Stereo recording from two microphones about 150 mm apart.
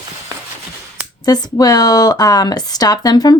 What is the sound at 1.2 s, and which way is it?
Speech, 25° left (ahead or behind).